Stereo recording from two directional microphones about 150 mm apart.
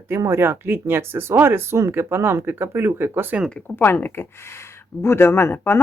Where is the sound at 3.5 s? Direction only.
10° left (ahead or behind).